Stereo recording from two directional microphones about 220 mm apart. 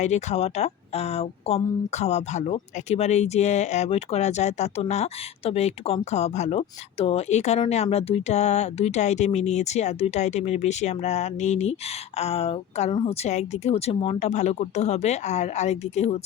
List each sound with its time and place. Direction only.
0.0 s a woman's voice: 30° left (ahead or behind)